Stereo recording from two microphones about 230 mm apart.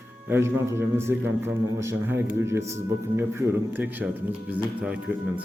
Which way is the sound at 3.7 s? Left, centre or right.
Centre.